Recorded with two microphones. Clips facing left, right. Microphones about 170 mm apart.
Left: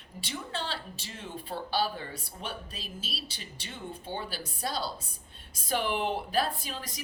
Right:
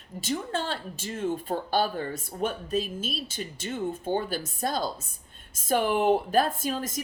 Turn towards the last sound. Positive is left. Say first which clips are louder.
# right 8 dB
turn(degrees=-45)  # may be behind; listen again after turning